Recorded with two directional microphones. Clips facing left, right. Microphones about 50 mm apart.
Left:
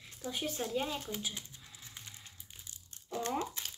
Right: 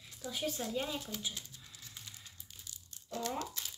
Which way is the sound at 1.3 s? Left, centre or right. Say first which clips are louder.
Left 1 dB; left.